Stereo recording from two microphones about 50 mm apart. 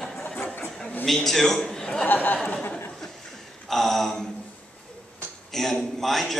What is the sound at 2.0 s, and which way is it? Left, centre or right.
Speech, left.